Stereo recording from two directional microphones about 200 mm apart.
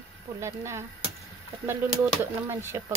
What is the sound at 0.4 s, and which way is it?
Speech, 15° right (ahead or behind).